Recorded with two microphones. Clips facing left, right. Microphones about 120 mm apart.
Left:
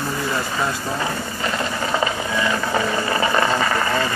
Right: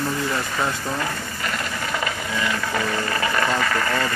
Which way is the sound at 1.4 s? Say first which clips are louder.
Left 4 dB; 25° left (ahead or behind).